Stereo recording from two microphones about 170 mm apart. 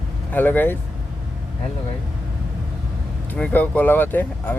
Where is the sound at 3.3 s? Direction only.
10° left (ahead or behind).